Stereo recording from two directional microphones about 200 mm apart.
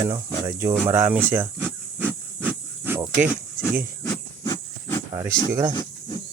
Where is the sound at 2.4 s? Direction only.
10° right (ahead or behind).